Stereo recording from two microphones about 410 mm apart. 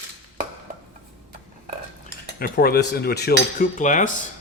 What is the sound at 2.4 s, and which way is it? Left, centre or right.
Cutlery, left.